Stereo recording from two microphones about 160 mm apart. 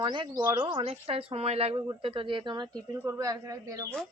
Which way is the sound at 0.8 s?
40° right (ahead or behind).